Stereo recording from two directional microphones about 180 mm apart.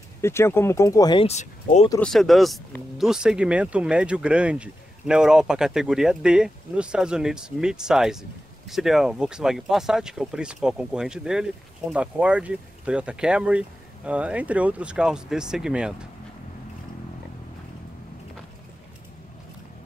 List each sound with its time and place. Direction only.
0.2 s speech: 15° left (ahead or behind)
1.2 s speech: 40° left (ahead or behind)
2.0 s speech: centre (ahead or behind)